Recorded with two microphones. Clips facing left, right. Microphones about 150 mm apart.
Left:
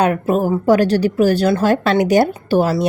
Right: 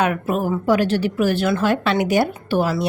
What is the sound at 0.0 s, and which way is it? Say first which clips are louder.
A woman's voice: left 4 dB; 40° left (ahead or behind).